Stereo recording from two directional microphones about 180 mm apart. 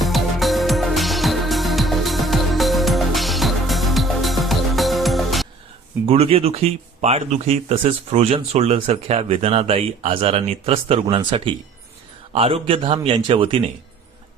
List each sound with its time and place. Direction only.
0.0 s music: centre (ahead or behind)
6.1 s speech: 30° right (ahead or behind)